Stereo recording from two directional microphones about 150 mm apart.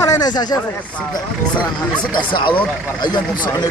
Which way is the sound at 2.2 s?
35° left (ahead or behind).